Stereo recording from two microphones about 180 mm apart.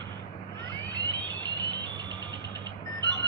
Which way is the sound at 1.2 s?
25° right (ahead or behind).